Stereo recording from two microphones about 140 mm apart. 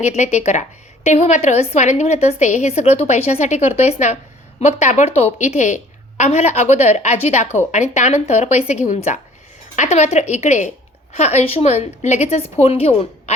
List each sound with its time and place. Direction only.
0.0 s a woman's voice: 55° left (ahead or behind)